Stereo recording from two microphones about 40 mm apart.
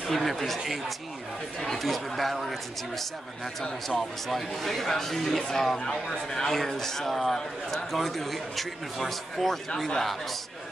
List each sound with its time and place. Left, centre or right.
0.1 s a man's voice: centre
1.6 s a man's voice: centre
4.3 s a man's voice: centre